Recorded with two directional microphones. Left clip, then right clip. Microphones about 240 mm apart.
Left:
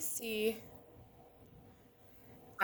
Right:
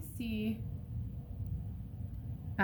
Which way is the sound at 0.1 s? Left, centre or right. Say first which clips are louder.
Left 5 dB; left.